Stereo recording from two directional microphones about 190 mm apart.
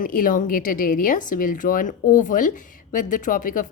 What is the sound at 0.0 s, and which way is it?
A woman's voice, 45° left (ahead or behind).